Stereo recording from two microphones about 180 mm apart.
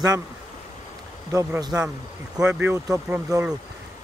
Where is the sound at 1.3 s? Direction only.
20° right (ahead or behind).